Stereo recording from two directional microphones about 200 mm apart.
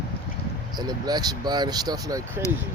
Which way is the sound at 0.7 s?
20° right (ahead or behind).